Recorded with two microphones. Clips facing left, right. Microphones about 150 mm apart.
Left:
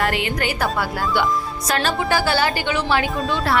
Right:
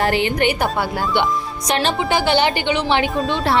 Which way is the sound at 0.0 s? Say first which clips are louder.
Right 4 dB; 25° right (ahead or behind).